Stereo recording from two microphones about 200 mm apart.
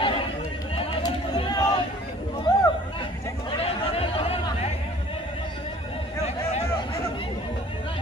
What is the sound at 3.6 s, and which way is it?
Chatter, 30° left (ahead or behind).